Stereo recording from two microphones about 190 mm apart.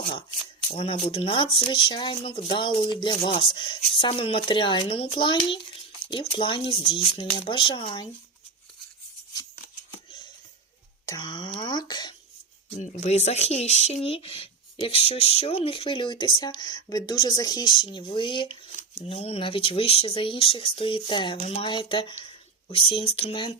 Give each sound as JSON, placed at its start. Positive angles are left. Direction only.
{"t": 0.0, "sound": "speech", "side_deg": 25}
{"t": 11.0, "sound": "speech", "side_deg": 20}
{"t": 12.8, "sound": "speech", "side_deg": 35}
{"t": 21.3, "sound": "speech", "side_deg": 35}